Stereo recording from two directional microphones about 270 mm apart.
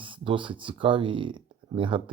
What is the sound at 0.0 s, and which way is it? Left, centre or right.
Speech, centre.